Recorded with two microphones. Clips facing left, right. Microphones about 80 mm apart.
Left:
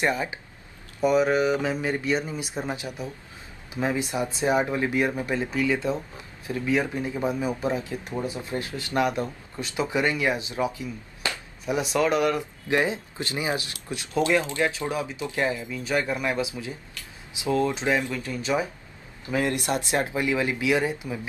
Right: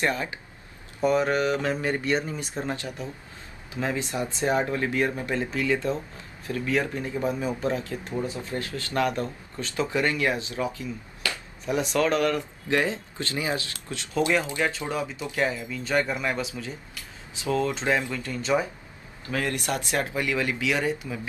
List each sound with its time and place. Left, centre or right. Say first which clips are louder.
0.0 s speech: left 1 dB; centre
1.0 s speech: left 2 dB; centre
19.3 s speech: left 3 dB; left